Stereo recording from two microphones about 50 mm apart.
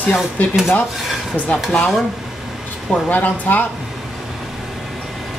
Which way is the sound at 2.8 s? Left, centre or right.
Centre.